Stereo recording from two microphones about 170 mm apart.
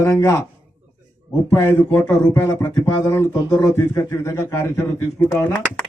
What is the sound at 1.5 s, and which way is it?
Speech, 15° left (ahead or behind).